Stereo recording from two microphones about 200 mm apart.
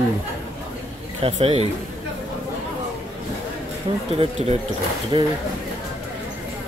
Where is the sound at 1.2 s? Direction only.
30° right (ahead or behind).